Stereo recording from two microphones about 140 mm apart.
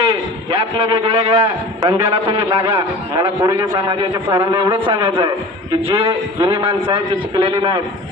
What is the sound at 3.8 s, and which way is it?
A man's voice, 35° right (ahead or behind).